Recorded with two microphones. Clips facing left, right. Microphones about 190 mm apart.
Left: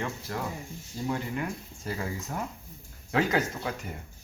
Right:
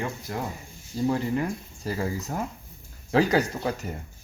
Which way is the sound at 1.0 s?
35° right (ahead or behind).